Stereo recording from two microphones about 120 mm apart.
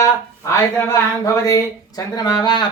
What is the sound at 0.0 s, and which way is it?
Speech, 25° left (ahead or behind).